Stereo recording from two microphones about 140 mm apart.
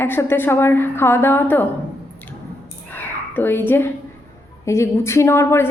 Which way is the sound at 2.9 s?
15° left (ahead or behind).